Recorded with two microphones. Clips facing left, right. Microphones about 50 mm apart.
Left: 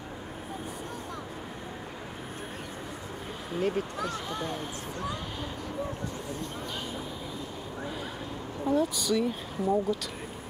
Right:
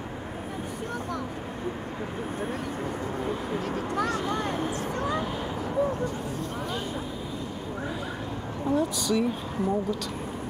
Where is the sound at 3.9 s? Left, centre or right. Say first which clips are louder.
Right 6 dB; right.